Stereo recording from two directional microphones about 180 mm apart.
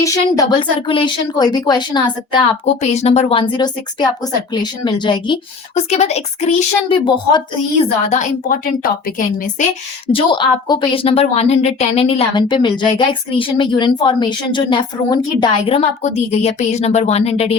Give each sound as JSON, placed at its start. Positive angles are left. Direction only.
{"t": 0.0, "sound": "speech", "side_deg": 20}
{"t": 2.8, "sound": "a woman's voice", "side_deg": 35}
{"t": 3.6, "sound": "a woman's voice", "side_deg": 25}
{"t": 10.1, "sound": "a woman's voice", "side_deg": 30}